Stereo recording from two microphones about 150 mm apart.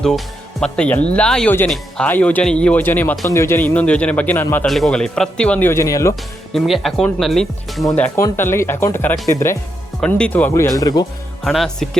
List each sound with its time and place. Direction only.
0.6 s speech: 10° left (ahead or behind)
6.5 s speech: centre (ahead or behind); by 9.6 s 15° left (ahead or behind)
10.0 s speech: 5° left (ahead or behind); by 11.0 s 25° left (ahead or behind)
11.4 s speech: centre (ahead or behind)